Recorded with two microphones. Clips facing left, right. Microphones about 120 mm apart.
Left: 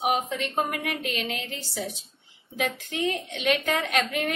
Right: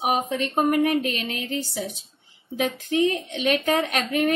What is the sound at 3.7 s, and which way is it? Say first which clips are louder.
Speech: right 3 dB; 45° right (ahead or behind).